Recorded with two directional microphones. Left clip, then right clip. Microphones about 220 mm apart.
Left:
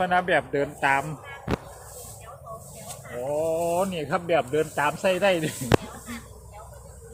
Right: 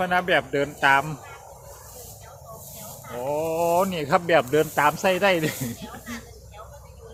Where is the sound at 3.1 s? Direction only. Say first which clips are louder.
Even; 25° right (ahead or behind).